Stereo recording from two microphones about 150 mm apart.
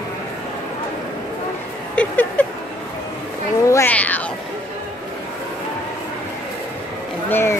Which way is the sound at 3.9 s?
10° left (ahead or behind).